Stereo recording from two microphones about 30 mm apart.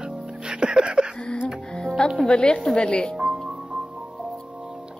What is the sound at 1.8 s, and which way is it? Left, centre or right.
Music, left.